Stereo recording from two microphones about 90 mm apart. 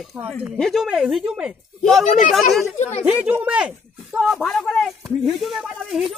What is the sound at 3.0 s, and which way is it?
Speech, 20° right (ahead or behind).